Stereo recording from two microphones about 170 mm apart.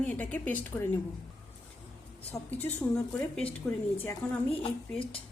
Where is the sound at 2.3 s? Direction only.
15° left (ahead or behind).